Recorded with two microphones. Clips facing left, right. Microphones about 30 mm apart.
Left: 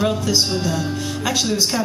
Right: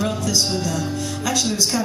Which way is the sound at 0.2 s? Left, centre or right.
Left.